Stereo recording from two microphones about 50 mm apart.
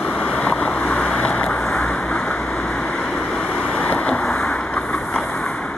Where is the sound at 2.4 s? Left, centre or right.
Centre.